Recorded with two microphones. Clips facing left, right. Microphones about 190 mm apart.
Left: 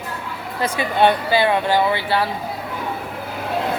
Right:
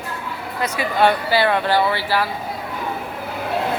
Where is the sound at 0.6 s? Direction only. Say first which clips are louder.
Left 1 dB; 25° left (ahead or behind).